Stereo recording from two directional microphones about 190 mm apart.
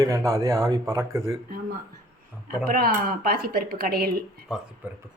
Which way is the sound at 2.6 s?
50° right (ahead or behind).